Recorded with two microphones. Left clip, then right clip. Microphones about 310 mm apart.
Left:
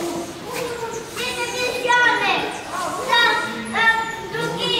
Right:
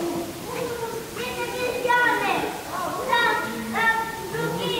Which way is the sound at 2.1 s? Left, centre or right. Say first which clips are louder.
Left 4 dB; centre.